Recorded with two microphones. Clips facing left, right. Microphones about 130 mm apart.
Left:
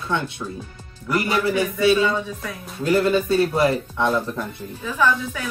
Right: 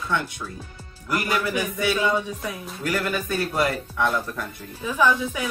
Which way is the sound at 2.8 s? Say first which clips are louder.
Left 8 dB; 25° left (ahead or behind).